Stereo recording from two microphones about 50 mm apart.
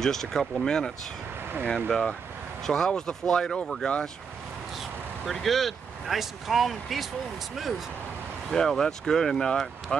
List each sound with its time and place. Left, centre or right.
0.0 s speech: centre
5.2 s speech: centre
8.5 s speech: centre